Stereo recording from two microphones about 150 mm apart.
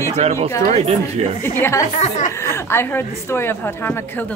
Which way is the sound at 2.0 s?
50° left (ahead or behind).